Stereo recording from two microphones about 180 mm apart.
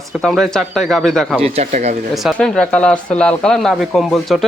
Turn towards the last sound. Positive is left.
turn(degrees=0)  # may be behind; listen again after turning